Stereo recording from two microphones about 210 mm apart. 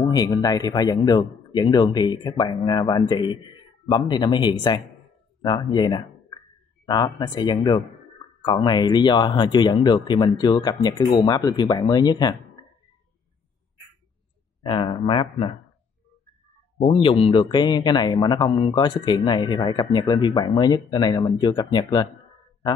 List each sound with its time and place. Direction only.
0.0 s a man's voice: 20° left (ahead or behind)
14.6 s a man's voice: 25° left (ahead or behind)
16.8 s a man's voice: 25° left (ahead or behind)